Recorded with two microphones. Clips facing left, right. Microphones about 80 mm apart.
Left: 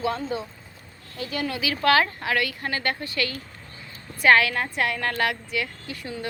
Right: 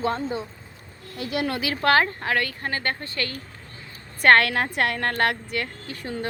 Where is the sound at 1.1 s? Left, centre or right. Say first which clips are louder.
Right 3 dB; right.